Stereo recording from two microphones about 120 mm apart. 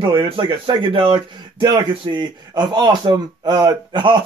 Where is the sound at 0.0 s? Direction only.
40° right (ahead or behind).